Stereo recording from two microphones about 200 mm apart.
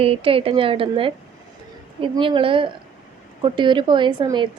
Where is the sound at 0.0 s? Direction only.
30° right (ahead or behind).